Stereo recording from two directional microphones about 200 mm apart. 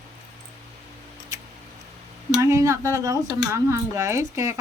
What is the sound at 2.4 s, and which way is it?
Speech, 15° right (ahead or behind).